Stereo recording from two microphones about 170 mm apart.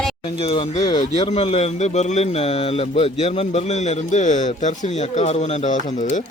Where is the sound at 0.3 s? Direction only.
30° left (ahead or behind).